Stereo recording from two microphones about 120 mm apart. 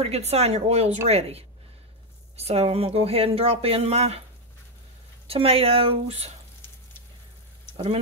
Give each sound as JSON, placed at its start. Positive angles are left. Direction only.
{"t": 0.0, "sound": "speech", "side_deg": -60}
{"t": 5.2, "sound": "speech", "side_deg": -55}
{"t": 7.7, "sound": "speech", "side_deg": -50}